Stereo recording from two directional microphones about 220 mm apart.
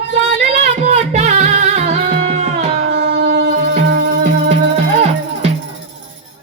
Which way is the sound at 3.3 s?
35° right (ahead or behind).